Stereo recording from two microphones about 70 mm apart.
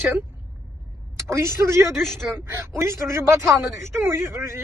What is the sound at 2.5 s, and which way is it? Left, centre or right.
Speech, right.